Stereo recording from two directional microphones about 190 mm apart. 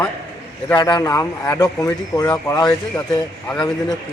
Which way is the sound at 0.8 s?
20° left (ahead or behind).